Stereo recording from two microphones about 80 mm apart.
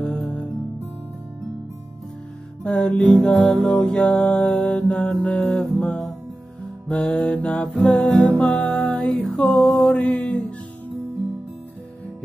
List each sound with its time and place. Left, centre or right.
0.0 s music: centre
2.6 s music: centre